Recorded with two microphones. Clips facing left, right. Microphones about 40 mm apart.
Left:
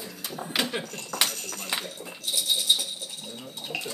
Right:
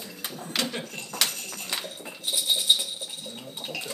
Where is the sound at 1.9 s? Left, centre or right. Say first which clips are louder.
Right 1 dB; centre.